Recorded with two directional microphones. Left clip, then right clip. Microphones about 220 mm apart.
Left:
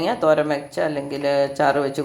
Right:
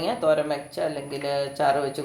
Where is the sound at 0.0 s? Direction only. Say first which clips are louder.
Left 4 dB; 25° left (ahead or behind).